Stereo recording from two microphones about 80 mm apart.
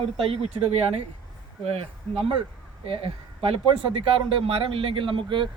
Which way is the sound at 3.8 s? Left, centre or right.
Right.